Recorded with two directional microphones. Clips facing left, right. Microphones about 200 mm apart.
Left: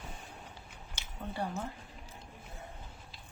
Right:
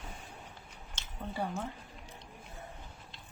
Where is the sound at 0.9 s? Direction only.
Centre (ahead or behind).